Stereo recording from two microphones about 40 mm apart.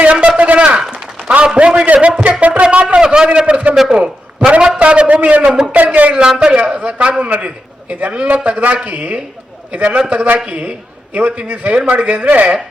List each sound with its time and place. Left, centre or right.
0.0 s a sound: right
1.5 s a man's voice: right
5.4 s a man's voice: centre
5.7 s a woman's voice: right
6.1 s a man's voice: right